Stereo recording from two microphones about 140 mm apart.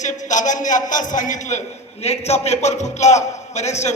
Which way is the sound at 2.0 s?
50° left (ahead or behind).